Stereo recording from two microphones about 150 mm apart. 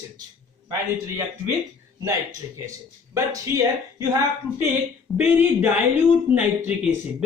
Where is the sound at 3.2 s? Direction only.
20° right (ahead or behind).